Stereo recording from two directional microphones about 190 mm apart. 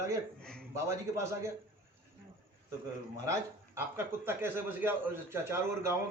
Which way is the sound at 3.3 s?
15° right (ahead or behind).